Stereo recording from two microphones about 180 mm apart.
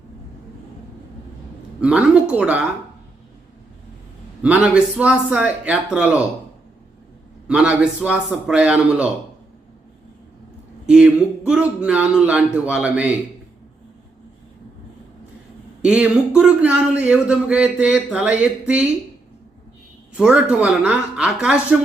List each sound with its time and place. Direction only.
1.8 s a man's voice: 5° right (ahead or behind)
4.4 s speech: 5° right (ahead or behind)
7.4 s a man's voice: 5° right (ahead or behind)
10.8 s a man's voice: 5° right (ahead or behind)
15.8 s speech: 5° right (ahead or behind)
20.1 s a man's voice: 5° right (ahead or behind)